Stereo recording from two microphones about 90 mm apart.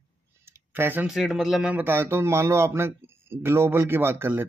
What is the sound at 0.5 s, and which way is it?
Clicking, 25° right (ahead or behind).